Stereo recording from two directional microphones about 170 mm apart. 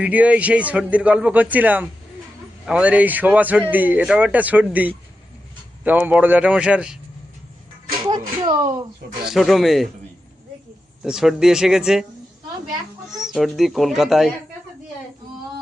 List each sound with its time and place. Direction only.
0.0 s a man's voice: 10° right (ahead or behind)
8.4 s speech: 25° right (ahead or behind)
9.3 s speech: centre (ahead or behind)
11.0 s speech: 5° right (ahead or behind)
13.1 s speech: centre (ahead or behind)